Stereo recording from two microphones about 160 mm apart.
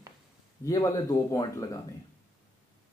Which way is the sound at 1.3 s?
25° left (ahead or behind).